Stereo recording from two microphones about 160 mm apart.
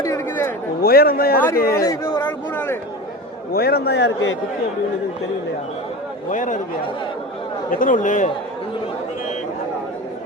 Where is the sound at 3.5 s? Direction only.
75° left (ahead or behind).